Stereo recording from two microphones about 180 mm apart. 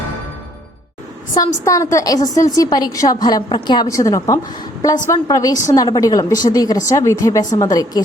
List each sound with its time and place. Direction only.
1.4 s a woman's voice: 20° left (ahead or behind)